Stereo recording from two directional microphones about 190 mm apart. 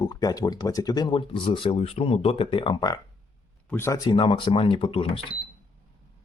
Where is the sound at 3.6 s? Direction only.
10° left (ahead or behind).